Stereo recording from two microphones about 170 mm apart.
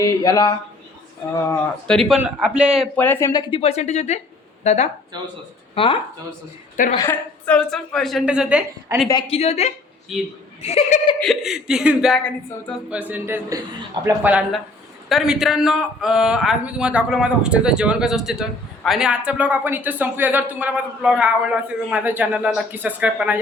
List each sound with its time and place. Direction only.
0.0 s speech: 20° left (ahead or behind)
1.9 s a man's voice: centre (ahead or behind)
2.9 s speech: 10° left (ahead or behind)
3.6 s a woman's voice: 40° left (ahead or behind)
6.9 s speech: 20° left (ahead or behind)
7.4 s a man's voice: 5° left (ahead or behind)
9.0 s a woman's voice: 30° left (ahead or behind)
10.1 s a man's voice: centre (ahead or behind)
10.6 s a woman's voice: 40° left (ahead or behind)
11.2 s a man's voice: centre (ahead or behind)